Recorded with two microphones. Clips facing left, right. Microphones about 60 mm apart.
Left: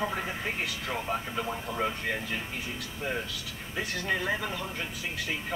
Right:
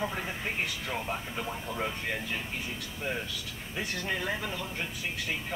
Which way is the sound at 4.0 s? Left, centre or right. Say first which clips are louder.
Left 4 dB; centre.